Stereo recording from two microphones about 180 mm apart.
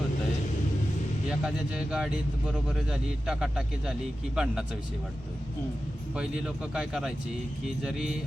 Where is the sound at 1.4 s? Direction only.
5° right (ahead or behind).